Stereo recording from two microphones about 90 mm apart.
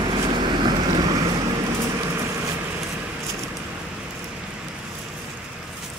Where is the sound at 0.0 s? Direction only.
50° right (ahead or behind).